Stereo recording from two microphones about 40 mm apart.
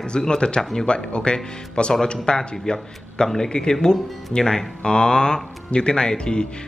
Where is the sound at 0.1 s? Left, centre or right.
Left.